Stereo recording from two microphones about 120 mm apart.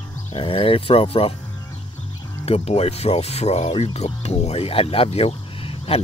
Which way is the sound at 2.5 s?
60° left (ahead or behind).